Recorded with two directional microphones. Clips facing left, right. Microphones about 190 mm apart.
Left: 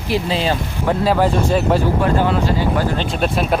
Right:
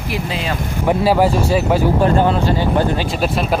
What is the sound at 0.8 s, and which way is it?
Speech, 10° right (ahead or behind).